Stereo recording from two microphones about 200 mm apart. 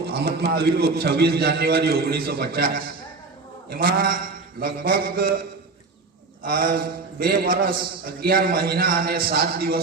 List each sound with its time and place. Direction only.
0.1 s a man's voice: 50° right (ahead or behind)